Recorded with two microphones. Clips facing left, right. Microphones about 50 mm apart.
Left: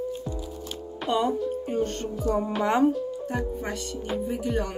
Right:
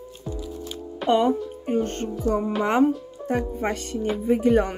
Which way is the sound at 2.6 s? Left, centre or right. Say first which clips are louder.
Right 2 dB; right.